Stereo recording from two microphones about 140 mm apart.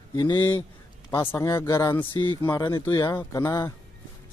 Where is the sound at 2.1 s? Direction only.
35° left (ahead or behind).